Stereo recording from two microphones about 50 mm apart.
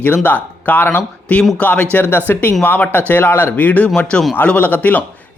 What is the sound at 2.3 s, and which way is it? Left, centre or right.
Speech, left.